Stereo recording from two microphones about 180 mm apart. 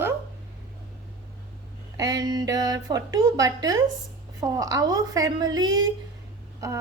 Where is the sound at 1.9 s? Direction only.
20° right (ahead or behind).